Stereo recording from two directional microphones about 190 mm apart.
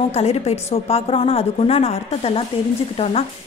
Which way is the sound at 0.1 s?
35° left (ahead or behind).